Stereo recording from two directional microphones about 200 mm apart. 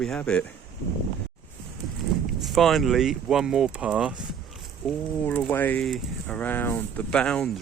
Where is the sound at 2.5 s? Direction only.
Centre (ahead or behind).